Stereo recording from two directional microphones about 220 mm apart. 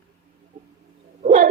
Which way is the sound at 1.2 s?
30° right (ahead or behind).